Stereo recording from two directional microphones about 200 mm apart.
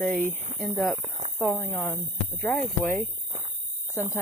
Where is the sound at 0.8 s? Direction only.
Centre (ahead or behind).